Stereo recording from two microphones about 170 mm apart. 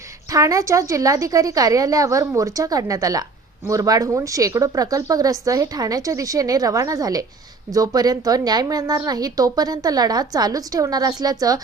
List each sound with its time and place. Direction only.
0.3 s a woman's voice: 20° right (ahead or behind)